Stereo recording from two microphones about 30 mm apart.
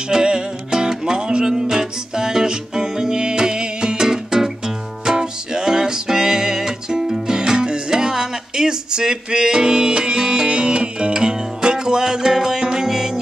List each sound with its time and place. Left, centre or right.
0.1 s music: right
1.4 s music: centre
4.1 s music: centre; by 11.1 s right
11.1 s music: right